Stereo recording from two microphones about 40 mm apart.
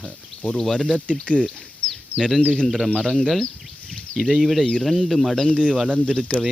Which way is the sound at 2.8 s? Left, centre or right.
Left.